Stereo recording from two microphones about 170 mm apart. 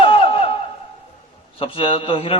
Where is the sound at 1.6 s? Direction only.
30° left (ahead or behind).